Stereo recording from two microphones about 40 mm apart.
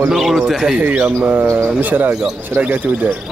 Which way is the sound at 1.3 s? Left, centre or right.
Right.